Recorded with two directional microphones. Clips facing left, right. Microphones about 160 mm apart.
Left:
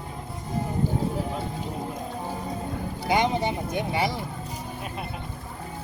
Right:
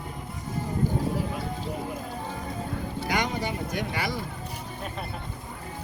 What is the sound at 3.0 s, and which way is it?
Speech, 25° left (ahead or behind).